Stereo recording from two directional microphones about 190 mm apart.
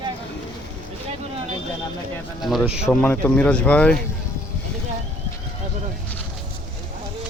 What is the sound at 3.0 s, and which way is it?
Speech, 5° left (ahead or behind).